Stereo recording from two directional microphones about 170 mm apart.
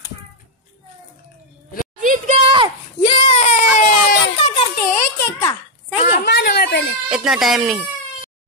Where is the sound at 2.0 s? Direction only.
50° right (ahead or behind).